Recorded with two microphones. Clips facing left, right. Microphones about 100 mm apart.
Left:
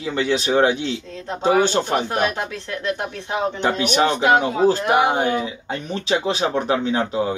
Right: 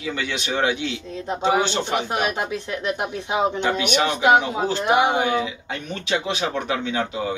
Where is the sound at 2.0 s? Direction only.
15° right (ahead or behind).